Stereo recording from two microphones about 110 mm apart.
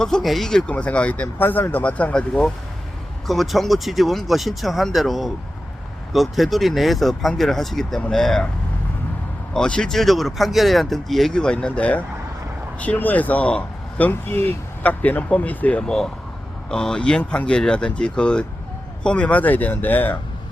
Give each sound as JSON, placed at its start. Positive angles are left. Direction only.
{"t": 0.0, "sound": "speech", "side_deg": 5}
{"t": 9.5, "sound": "speech", "side_deg": 10}